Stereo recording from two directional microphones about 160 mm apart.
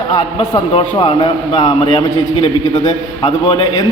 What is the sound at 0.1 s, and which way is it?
A man's voice, 30° left (ahead or behind).